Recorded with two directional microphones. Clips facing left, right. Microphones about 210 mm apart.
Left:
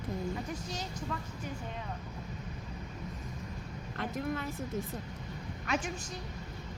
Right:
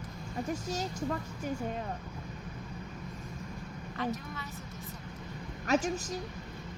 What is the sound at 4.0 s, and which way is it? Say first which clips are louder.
Speech: left 2 dB; 55° left (ahead or behind).